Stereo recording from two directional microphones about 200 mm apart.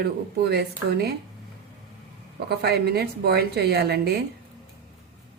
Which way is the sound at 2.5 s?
55° right (ahead or behind).